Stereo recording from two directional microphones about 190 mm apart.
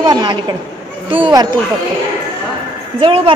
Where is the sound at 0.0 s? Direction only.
20° right (ahead or behind).